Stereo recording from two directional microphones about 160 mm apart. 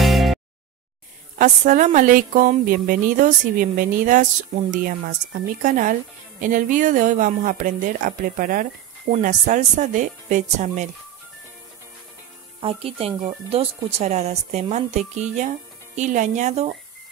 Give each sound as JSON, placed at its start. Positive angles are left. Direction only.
{"t": 0.0, "sound": "a sound", "side_deg": 0}
{"t": 1.4, "sound": "speech", "side_deg": -50}
{"t": 12.5, "sound": "speech", "side_deg": -35}